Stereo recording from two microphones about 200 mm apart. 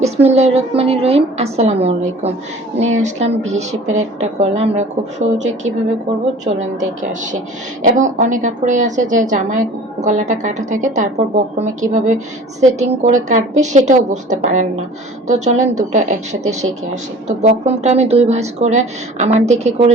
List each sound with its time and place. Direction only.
0.0 s a woman's voice: 30° right (ahead or behind)